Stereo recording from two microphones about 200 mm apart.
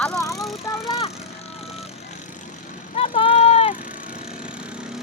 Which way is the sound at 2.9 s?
30° left (ahead or behind).